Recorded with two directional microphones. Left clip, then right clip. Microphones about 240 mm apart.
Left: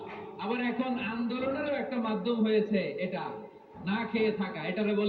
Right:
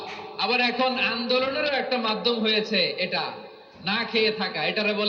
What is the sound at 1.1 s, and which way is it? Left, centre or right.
A man's voice, right.